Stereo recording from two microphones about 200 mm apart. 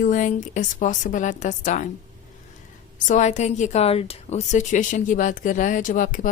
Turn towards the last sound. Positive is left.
turn(degrees=40)  # may be behind; listen again after turning